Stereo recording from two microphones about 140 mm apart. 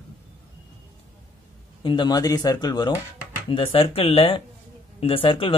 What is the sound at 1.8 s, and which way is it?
Speech, 35° left (ahead or behind).